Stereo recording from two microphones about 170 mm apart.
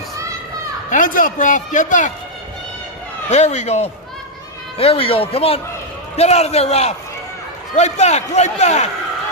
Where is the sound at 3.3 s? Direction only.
40° left (ahead or behind).